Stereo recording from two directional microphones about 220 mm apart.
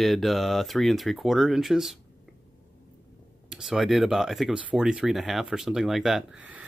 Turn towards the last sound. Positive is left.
turn(degrees=-5)  # may be behind; listen again after turning